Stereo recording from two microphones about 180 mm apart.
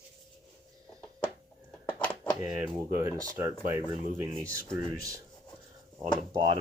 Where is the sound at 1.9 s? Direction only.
10° left (ahead or behind).